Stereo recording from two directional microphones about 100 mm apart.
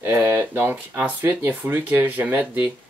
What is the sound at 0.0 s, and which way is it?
Speech, 20° right (ahead or behind).